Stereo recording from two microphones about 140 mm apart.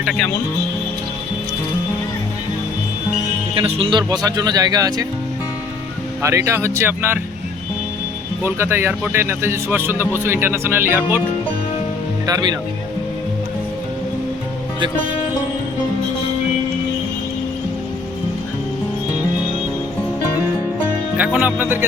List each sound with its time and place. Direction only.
3.5 s speech: 40° right (ahead or behind)
6.2 s speech: 20° right (ahead or behind)
8.4 s speech: 15° right (ahead or behind)
12.2 s speech: 25° right (ahead or behind)
21.2 s speech: 10° right (ahead or behind)